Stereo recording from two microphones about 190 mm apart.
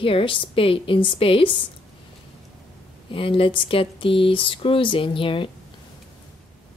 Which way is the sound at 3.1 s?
30° left (ahead or behind).